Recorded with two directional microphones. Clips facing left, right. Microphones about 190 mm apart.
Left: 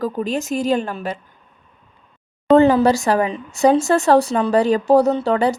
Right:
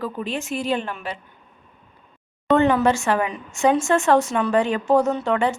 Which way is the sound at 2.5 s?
35° left (ahead or behind).